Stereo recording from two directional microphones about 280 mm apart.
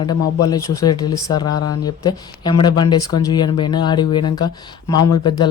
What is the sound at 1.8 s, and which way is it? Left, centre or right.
Speech, centre.